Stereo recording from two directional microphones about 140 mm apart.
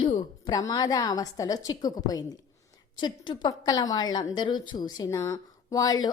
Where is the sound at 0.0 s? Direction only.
35° left (ahead or behind).